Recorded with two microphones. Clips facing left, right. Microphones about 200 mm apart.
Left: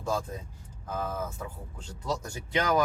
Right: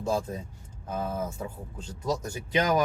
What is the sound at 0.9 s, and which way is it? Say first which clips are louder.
Speech: right 2 dB; 20° right (ahead or behind).